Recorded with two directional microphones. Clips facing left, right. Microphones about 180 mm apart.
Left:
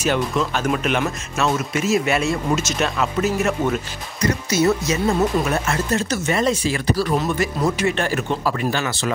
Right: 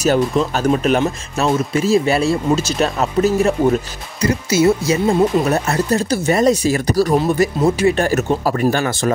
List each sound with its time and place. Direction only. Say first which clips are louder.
0.0 s speech: right 5 dB; 40° right (ahead or behind)